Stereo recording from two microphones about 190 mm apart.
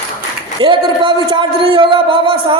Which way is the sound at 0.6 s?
25° right (ahead or behind).